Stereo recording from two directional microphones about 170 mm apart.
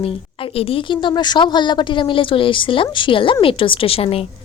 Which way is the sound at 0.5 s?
35° left (ahead or behind).